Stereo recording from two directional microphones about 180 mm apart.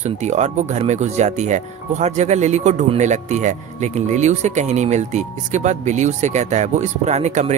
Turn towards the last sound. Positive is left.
turn(degrees=-40)  # may be behind; listen again after turning